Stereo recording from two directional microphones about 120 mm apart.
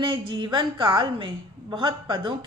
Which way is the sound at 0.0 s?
45° right (ahead or behind).